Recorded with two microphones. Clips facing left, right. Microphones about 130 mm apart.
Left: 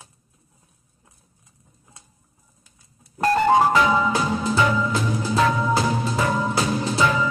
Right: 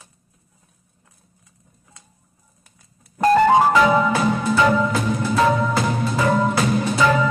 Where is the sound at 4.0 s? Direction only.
55° right (ahead or behind).